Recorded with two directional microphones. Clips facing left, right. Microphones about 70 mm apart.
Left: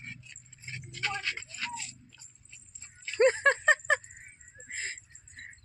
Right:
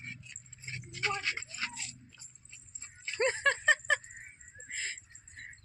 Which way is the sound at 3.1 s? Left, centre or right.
Left.